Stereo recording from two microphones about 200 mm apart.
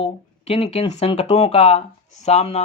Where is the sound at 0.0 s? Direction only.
30° left (ahead or behind).